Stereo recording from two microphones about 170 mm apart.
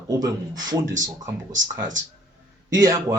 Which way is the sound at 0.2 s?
20° right (ahead or behind).